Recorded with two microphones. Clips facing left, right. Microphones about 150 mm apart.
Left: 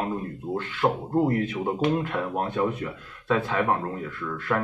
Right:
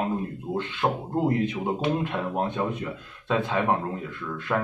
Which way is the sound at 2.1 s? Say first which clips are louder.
Even; 20° right (ahead or behind).